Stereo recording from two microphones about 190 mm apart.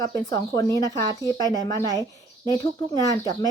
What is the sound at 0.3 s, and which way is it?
Speech, 20° left (ahead or behind).